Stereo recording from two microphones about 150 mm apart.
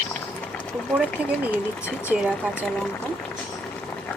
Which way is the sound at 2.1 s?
5° right (ahead or behind).